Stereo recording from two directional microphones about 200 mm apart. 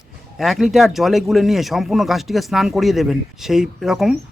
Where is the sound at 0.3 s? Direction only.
Centre (ahead or behind).